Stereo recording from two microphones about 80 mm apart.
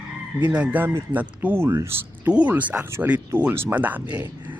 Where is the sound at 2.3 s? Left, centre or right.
Centre.